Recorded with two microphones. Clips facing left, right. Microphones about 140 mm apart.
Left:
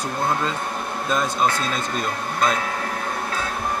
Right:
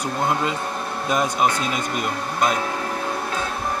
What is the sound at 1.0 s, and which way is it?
Speech, 15° right (ahead or behind).